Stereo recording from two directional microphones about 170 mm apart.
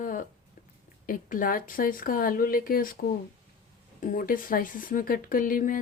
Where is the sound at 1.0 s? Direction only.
55° left (ahead or behind).